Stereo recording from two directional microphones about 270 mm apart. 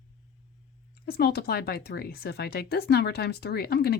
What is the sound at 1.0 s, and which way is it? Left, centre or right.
Speech, left.